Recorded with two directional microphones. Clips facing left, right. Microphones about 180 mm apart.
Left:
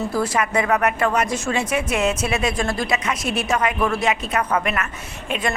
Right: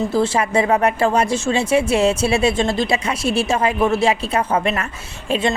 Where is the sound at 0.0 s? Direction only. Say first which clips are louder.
Right 4 dB; 25° right (ahead or behind).